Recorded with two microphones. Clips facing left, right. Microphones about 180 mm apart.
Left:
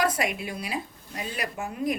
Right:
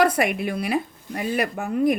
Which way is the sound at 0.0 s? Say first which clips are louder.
Right 6 dB; 60° right (ahead or behind).